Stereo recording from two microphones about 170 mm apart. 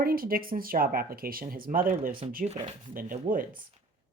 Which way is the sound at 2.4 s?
40° right (ahead or behind).